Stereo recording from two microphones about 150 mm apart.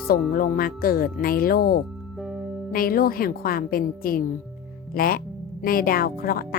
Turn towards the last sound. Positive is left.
turn(degrees=80)